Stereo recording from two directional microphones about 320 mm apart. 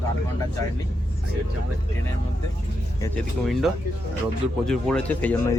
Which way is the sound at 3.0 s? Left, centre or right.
Centre.